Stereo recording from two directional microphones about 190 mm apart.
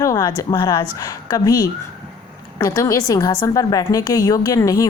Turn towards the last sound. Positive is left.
turn(degrees=20)  # may be behind; listen again after turning